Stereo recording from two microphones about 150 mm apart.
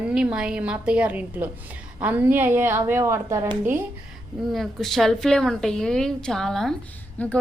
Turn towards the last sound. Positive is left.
turn(degrees=10)  # may be behind; listen again after turning